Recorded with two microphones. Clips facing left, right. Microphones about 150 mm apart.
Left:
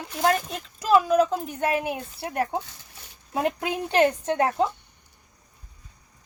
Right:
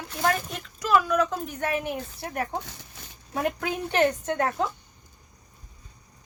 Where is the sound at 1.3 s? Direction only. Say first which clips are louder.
Left 3 dB; 20° left (ahead or behind).